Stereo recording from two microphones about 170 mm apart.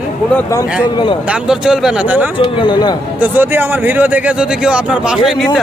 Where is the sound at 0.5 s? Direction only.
25° left (ahead or behind).